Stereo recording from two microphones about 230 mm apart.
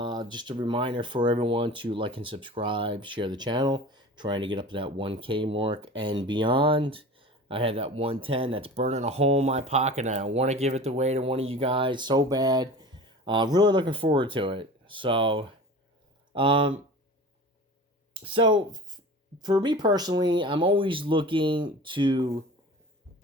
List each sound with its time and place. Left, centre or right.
0.0 s speech: centre
18.1 s speech: right